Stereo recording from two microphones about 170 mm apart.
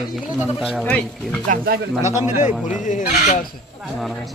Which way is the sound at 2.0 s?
45° left (ahead or behind).